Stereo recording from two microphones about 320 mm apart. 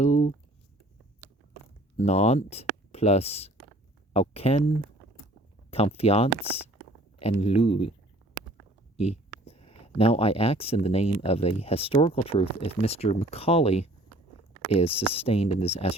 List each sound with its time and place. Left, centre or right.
0.0 s a sound: left
2.0 s speech: centre
5.7 s speech: centre
9.0 s speech: centre